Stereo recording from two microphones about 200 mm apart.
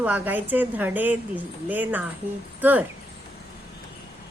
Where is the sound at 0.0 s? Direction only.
10° right (ahead or behind).